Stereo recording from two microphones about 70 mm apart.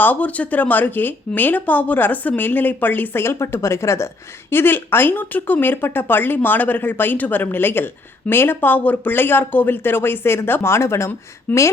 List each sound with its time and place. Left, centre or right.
0.0 s speech: left
11.5 s speech: left